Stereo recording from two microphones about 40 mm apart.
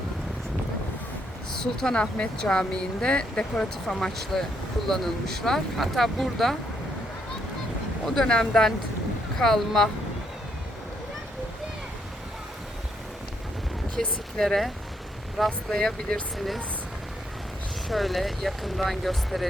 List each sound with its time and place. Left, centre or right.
1.5 s speech: centre
3.8 s speech: centre
8.0 s speech: centre
13.9 s a sound: centre
15.4 s speech: centre
17.8 s speech: centre